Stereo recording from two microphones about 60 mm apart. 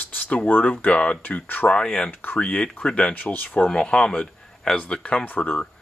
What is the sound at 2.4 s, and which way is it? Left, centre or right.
Speech, centre.